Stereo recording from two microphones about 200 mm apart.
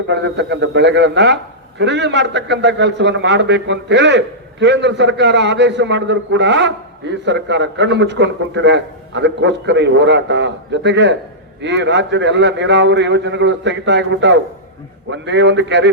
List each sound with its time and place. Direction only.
0.1 s a man's voice: 60° right (ahead or behind)